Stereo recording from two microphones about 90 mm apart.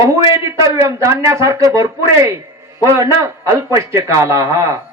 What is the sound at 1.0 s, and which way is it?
A man's voice, 35° right (ahead or behind).